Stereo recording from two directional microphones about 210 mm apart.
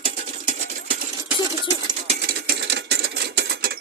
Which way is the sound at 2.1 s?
50° right (ahead or behind).